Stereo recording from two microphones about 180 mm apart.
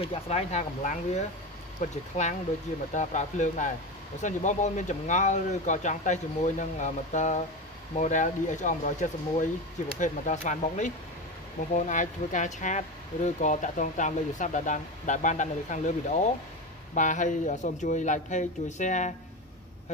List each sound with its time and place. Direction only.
0.0 s speech: 35° left (ahead or behind)
9.9 s speech: 45° left (ahead or behind)